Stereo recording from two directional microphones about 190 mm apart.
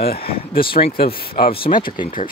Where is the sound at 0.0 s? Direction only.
55° left (ahead or behind).